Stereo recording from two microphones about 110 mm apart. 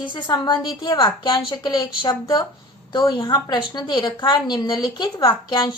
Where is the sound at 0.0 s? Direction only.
45° left (ahead or behind).